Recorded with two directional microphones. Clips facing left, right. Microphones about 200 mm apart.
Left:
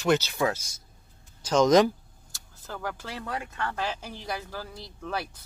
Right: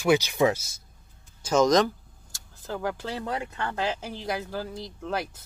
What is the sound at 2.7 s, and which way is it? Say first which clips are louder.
Speech: right 5 dB; 20° right (ahead or behind).